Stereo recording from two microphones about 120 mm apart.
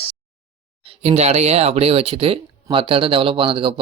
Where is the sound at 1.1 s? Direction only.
65° right (ahead or behind); by 3.7 s 45° right (ahead or behind).